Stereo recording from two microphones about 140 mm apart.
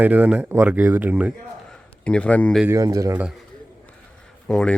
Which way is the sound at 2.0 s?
5° left (ahead or behind).